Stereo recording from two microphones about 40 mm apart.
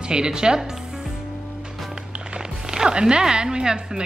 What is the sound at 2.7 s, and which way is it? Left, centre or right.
Music, right.